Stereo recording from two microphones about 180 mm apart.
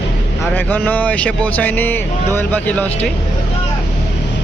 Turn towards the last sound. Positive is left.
turn(degrees=10)  # may be behind; listen again after turning